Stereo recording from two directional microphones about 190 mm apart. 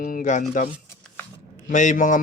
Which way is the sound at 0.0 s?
45° left (ahead or behind).